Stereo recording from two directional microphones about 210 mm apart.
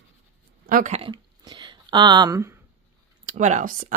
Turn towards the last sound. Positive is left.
turn(degrees=-35)  # may be behind; listen again after turning